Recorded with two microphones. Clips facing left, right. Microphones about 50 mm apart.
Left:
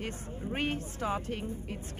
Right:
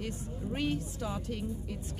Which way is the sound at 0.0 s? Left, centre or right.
Left.